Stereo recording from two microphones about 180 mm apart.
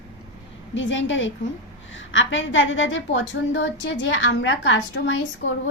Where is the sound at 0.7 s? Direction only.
90° left.